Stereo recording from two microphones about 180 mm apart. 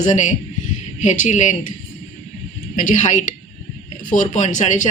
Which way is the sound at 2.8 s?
45° left (ahead or behind).